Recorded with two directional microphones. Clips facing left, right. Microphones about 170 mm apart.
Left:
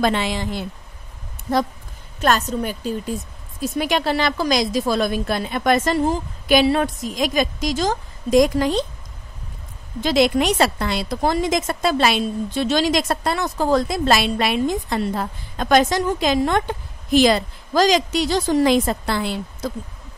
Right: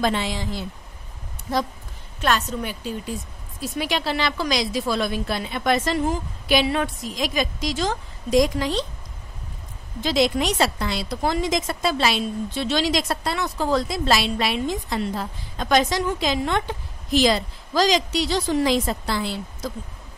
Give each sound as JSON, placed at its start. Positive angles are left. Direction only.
{"t": 0.0, "sound": "a woman's voice", "side_deg": 65}
{"t": 2.2, "sound": "a woman's voice", "side_deg": 45}
{"t": 10.0, "sound": "a woman's voice", "side_deg": 60}